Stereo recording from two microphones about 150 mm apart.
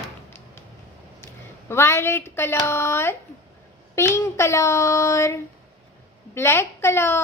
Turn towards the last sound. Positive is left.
turn(degrees=15)  # may be behind; listen again after turning